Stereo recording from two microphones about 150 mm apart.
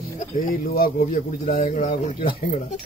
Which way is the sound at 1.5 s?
50° left (ahead or behind).